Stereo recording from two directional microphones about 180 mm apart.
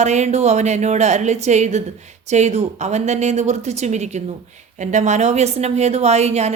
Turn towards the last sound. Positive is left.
turn(degrees=-35)  # may be behind; listen again after turning